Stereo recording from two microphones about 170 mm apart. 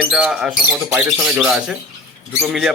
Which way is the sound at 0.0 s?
5° right (ahead or behind).